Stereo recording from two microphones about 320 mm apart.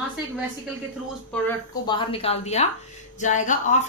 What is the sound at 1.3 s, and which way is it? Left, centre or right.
Speech, centre.